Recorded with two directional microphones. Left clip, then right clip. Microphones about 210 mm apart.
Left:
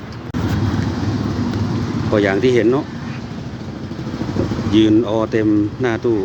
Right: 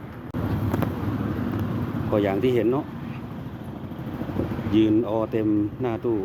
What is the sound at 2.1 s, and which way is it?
Speech, 10° right (ahead or behind).